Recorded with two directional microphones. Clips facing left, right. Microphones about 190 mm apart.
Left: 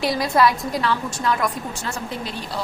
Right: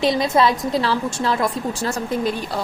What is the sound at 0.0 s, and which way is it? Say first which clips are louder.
A woman's voice: right 2 dB; 25° right (ahead or behind).